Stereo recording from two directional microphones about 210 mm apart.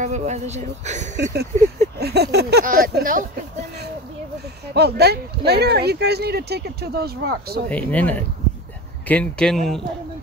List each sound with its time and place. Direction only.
0.0 s speech: 35° right (ahead or behind)
1.1 s speech: 50° right (ahead or behind)
4.7 s speech: 50° right (ahead or behind)
7.7 s speech: 5° left (ahead or behind)